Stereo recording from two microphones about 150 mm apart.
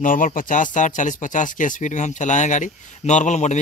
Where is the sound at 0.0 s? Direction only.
65° left (ahead or behind).